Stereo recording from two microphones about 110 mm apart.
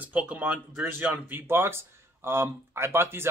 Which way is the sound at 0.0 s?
10° right (ahead or behind).